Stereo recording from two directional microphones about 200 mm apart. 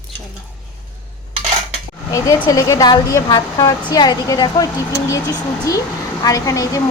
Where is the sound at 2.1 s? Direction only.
15° left (ahead or behind).